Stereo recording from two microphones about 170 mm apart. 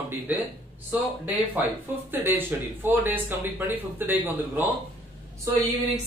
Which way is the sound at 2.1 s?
10° right (ahead or behind).